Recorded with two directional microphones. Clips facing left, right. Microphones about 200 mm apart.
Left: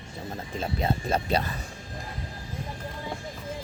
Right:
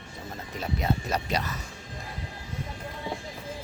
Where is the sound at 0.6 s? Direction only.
30° left (ahead or behind).